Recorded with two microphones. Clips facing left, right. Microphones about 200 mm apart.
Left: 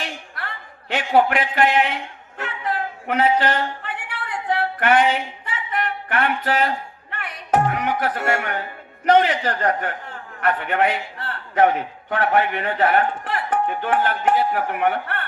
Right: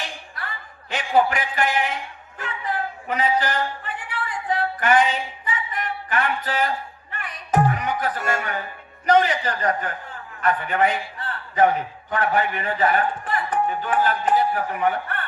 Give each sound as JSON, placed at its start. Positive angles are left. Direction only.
{"t": 0.0, "sound": "a sound", "side_deg": 65}
{"t": 5.7, "sound": "music", "side_deg": 60}
{"t": 9.0, "sound": "a man's voice", "side_deg": 60}